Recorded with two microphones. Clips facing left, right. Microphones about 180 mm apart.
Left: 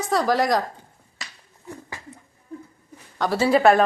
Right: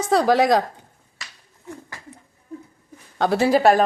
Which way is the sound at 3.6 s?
35° right (ahead or behind).